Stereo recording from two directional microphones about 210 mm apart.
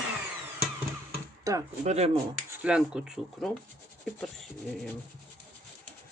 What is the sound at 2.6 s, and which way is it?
Speech, 5° right (ahead or behind).